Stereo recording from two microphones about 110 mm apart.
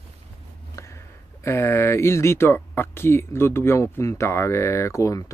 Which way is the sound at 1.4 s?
20° left (ahead or behind).